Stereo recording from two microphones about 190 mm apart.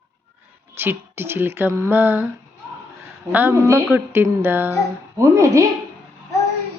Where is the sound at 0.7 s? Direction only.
10° right (ahead or behind).